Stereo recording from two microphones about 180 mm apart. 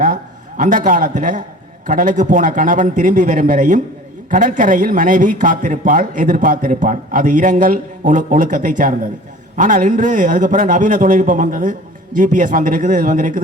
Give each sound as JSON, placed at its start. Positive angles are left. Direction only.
{"t": 0.0, "sound": "a man's voice", "side_deg": -45}